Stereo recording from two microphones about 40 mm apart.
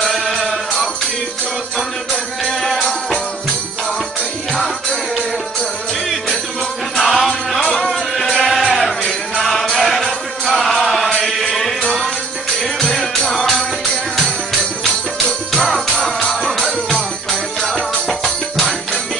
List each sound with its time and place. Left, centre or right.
0.0 s music: centre
2.6 s music: centre
7.0 s music: centre
11.8 s music: centre
13.3 s music: centre
15.5 s music: centre